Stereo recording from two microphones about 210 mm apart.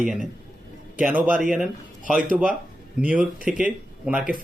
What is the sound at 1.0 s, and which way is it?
A man's voice, 5° right (ahead or behind).